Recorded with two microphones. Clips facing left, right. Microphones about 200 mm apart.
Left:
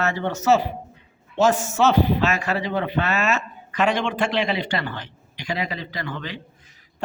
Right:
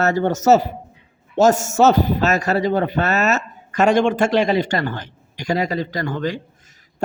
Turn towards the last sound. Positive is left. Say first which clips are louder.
# right 6 dB
turn(degrees=-45)  # may be behind; listen again after turning